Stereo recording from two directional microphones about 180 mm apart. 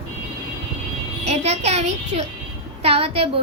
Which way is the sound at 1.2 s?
35° right (ahead or behind).